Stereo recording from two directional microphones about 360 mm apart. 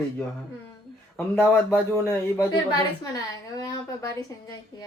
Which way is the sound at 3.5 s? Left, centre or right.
Centre.